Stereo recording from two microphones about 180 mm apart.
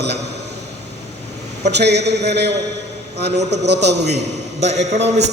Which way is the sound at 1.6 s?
70° right (ahead or behind).